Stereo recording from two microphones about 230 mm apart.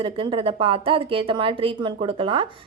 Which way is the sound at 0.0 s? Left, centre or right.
Right.